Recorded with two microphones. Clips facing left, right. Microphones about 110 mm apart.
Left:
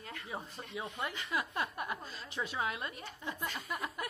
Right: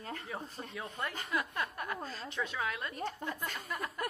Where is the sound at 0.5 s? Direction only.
40° right (ahead or behind).